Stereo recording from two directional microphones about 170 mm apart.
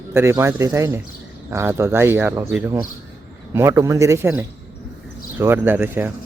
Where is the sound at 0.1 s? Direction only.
15° right (ahead or behind).